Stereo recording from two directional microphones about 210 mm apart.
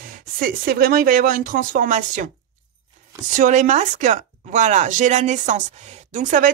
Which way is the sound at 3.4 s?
35° right (ahead or behind).